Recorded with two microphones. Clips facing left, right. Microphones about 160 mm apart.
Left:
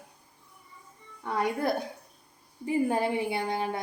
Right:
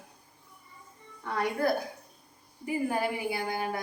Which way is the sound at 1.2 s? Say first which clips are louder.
Even; 20° left (ahead or behind).